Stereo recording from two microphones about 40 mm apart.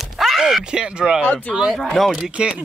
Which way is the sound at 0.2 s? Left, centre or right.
Centre.